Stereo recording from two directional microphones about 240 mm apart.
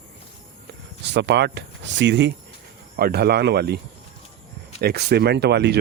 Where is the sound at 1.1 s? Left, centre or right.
Right.